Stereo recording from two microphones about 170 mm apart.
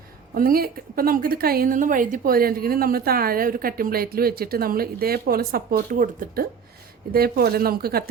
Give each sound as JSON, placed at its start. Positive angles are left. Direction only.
{"t": 0.3, "sound": "a woman's voice", "side_deg": -60}
{"t": 5.7, "sound": "a woman's voice", "side_deg": -55}